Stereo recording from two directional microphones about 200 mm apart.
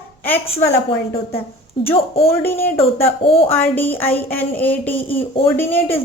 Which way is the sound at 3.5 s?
10° left (ahead or behind).